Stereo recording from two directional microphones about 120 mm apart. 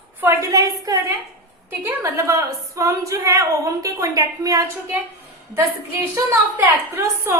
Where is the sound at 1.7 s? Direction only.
20° right (ahead or behind).